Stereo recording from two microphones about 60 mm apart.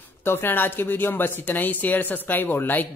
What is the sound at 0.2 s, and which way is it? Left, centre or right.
Speech, left.